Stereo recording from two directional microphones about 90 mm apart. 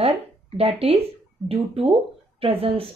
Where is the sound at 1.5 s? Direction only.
90° right.